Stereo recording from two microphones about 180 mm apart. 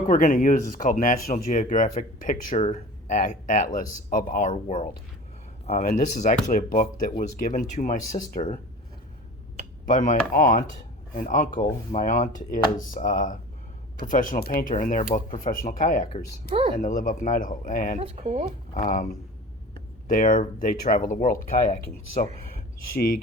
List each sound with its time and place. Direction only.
0.1 s speech: 45° left (ahead or behind)
9.8 s speech: 45° left (ahead or behind)
18.0 s speech: 35° right (ahead or behind)
18.7 s speech: 50° left (ahead or behind)